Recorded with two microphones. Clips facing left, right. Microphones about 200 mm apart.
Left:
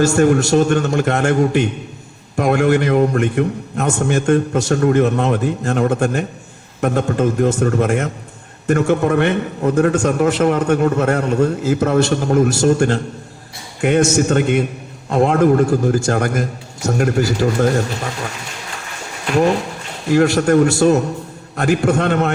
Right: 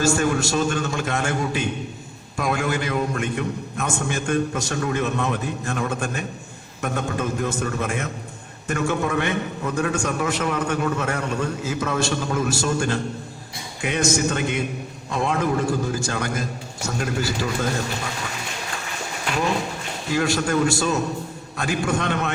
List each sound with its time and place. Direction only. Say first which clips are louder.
0.2 s a man's voice: left 9 dB; 65° left (ahead or behind)
3.9 s speech: left 9 dB; 45° left (ahead or behind)
4.5 s a man's voice: left 10 dB; 70° left (ahead or behind)
4.8 s a man's voice: left 8 dB; 55° left (ahead or behind)
14.2 s a man's voice: left 8 dB; 60° left (ahead or behind)
17.2 s speech: left 9 dB; 45° left (ahead or behind)
20.1 s a man's voice: left 9 dB; 60° left (ahead or behind)